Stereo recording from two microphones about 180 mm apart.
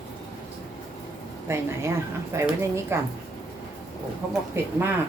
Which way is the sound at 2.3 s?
15° right (ahead or behind).